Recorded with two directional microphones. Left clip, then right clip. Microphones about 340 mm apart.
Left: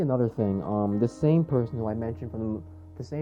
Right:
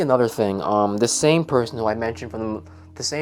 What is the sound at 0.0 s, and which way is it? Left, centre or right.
Speech, centre.